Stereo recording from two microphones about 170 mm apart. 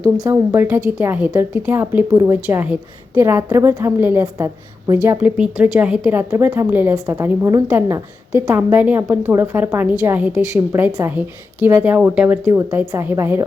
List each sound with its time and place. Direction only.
0.2 s a woman's voice: 15° right (ahead or behind)